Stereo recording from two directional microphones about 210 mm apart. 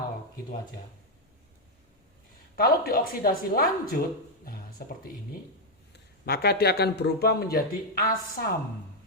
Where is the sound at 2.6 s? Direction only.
45° left (ahead or behind).